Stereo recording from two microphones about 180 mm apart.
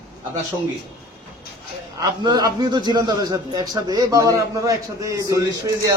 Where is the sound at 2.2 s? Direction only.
20° right (ahead or behind).